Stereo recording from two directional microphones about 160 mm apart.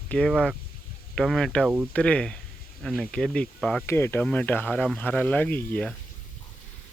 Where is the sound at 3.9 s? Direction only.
15° left (ahead or behind).